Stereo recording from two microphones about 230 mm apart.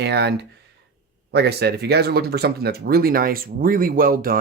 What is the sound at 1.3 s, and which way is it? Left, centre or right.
Speech, right.